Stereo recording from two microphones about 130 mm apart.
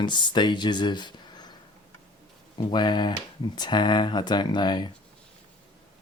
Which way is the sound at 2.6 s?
35° left (ahead or behind).